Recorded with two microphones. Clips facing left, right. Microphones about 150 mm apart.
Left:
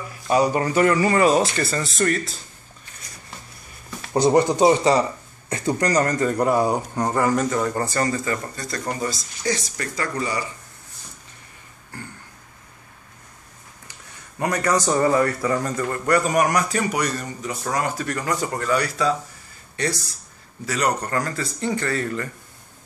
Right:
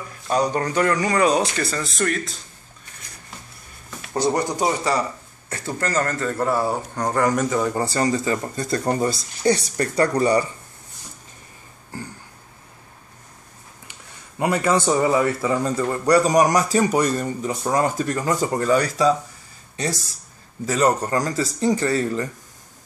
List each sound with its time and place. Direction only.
0.1 s speech: 5° left (ahead or behind)
4.1 s speech: 20° left (ahead or behind)
7.1 s speech: 5° left (ahead or behind); by 10.4 s 35° right (ahead or behind)
14.4 s speech: 25° right (ahead or behind)
14.9 s speech: 10° right (ahead or behind)
20.7 s speech: 25° right (ahead or behind)
21.4 s speech: 40° right (ahead or behind)
22.0 s speech: 20° right (ahead or behind)